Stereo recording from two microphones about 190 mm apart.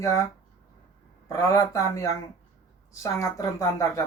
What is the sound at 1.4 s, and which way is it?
Speech, 20° left (ahead or behind).